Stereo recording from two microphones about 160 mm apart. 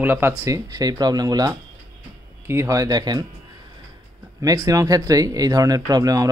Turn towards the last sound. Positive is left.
turn(degrees=-25)  # may be behind; listen again after turning